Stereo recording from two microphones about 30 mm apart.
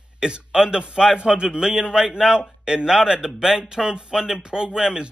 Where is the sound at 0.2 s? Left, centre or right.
Right.